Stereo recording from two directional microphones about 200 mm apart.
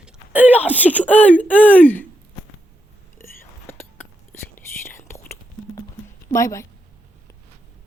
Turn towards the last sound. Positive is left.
turn(degrees=15)  # may be behind; listen again after turning